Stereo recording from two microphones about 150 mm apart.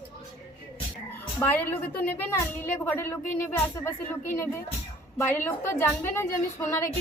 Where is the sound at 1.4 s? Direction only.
15° left (ahead or behind).